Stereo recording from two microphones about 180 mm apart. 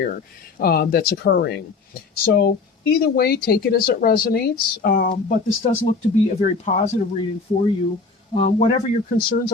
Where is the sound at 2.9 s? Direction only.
60° left (ahead or behind).